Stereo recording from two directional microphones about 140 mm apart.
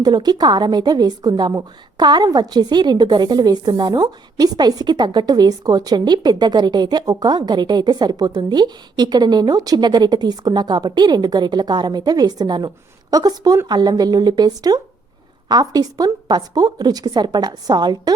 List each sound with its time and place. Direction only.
0.0 s a woman's voice: 30° right (ahead or behind)